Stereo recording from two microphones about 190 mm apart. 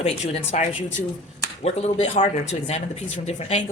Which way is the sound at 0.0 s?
35° left (ahead or behind).